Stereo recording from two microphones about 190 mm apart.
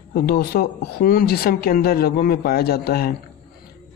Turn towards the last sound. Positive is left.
turn(degrees=55)  # may be behind; listen again after turning